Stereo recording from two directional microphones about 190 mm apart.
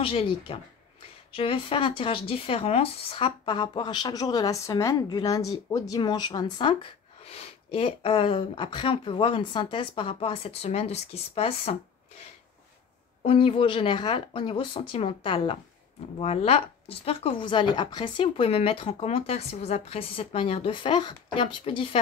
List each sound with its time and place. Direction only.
0.0 s speech: 30° left (ahead or behind)
13.2 s speech: 30° left (ahead or behind)